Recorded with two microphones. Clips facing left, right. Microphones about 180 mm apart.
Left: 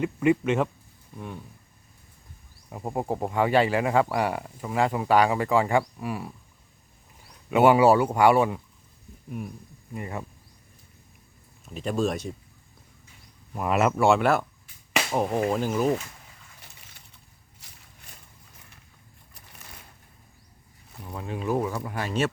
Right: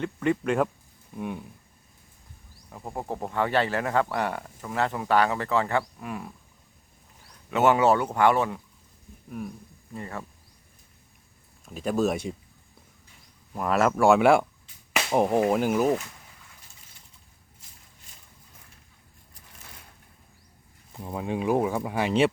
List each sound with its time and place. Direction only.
0.0 s speech: 10° left (ahead or behind)
1.1 s a sound: 10° right (ahead or behind)
2.6 s speech: 25° left (ahead or behind); by 6.3 s 5° left (ahead or behind)
7.5 s speech: 10° left (ahead or behind)
9.9 s speech: 15° left (ahead or behind)
11.6 s speech: centre (ahead or behind)
13.5 s speech: 5° left (ahead or behind)
14.2 s speech: 10° right (ahead or behind)
16.6 s a sound: 70° left (ahead or behind)
21.1 s speech: 15° right (ahead or behind)